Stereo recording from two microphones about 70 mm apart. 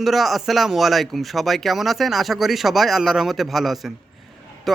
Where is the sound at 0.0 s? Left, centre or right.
Centre.